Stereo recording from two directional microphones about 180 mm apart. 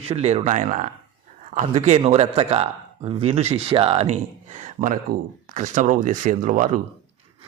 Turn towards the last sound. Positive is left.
turn(degrees=-45)  # may be behind; listen again after turning